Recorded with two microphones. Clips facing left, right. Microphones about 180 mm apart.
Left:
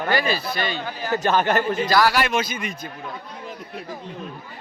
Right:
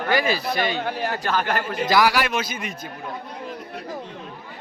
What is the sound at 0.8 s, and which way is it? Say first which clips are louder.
Speech: right 4 dB; 65° right (ahead or behind).